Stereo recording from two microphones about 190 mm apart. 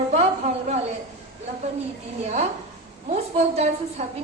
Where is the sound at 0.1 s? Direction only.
35° right (ahead or behind).